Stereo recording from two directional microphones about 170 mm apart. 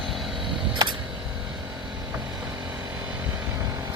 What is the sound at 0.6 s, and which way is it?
Camera, 30° right (ahead or behind).